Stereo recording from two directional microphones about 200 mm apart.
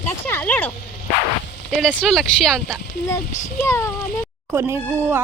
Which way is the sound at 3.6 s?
15° left (ahead or behind).